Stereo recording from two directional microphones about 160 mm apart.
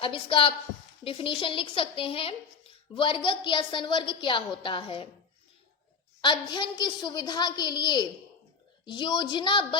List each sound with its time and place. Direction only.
0.0 s speech: 35° left (ahead or behind)
6.2 s a woman's voice: 30° left (ahead or behind)